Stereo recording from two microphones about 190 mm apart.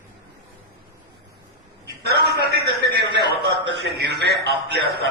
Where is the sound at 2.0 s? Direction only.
55° right (ahead or behind).